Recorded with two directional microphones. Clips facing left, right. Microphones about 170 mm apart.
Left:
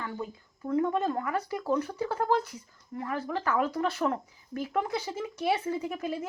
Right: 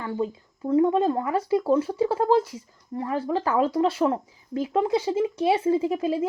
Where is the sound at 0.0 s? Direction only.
30° right (ahead or behind).